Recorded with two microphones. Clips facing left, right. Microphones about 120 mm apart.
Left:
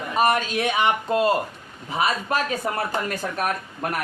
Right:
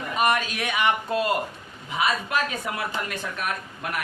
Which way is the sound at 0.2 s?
30° left (ahead or behind).